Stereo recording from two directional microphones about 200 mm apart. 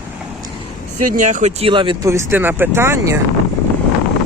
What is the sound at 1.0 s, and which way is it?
Speech, 40° right (ahead or behind).